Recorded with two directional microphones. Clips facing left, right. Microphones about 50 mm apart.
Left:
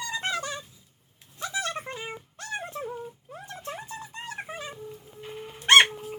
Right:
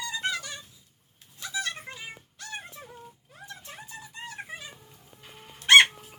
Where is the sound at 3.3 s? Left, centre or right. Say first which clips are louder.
Left 6 dB; left.